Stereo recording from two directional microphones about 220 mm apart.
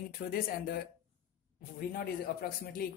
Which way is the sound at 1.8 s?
40° left (ahead or behind).